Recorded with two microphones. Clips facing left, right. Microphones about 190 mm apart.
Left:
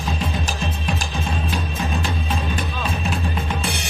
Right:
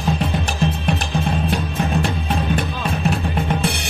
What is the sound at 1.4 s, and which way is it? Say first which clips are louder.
Music: right 4 dB; 60° right (ahead or behind).